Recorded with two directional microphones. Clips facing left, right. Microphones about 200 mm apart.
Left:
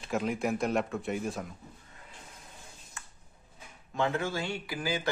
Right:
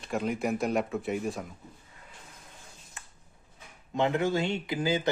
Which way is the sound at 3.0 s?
20° right (ahead or behind).